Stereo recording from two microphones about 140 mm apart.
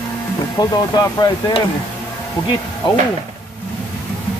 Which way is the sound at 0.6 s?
30° left (ahead or behind).